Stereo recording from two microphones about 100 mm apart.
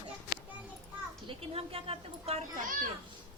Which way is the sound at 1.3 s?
75° right (ahead or behind).